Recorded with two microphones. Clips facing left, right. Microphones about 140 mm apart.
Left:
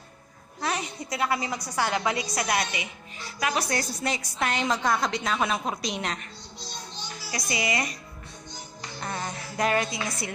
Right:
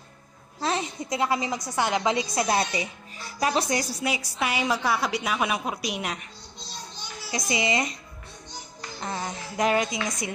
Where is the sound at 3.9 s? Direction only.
10° right (ahead or behind).